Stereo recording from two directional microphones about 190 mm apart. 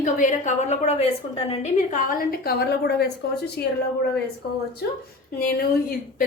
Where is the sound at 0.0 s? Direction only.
40° left (ahead or behind); by 3.7 s 60° left (ahead or behind).